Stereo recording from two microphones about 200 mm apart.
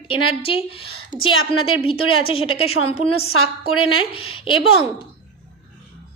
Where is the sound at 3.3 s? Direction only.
90° left.